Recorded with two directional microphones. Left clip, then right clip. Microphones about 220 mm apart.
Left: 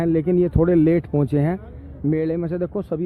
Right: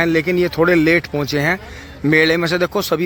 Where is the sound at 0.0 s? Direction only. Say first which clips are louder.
Right 4 dB; centre (ahead or behind).